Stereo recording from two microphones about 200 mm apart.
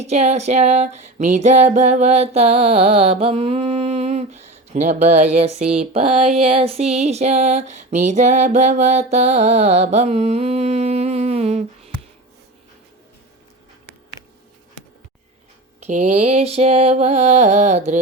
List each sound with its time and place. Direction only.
0.0 s music: 35° right (ahead or behind)
15.8 s music: 35° right (ahead or behind)